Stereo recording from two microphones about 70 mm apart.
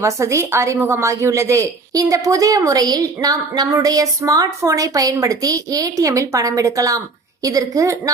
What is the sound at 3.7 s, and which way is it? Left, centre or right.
A woman's voice, right.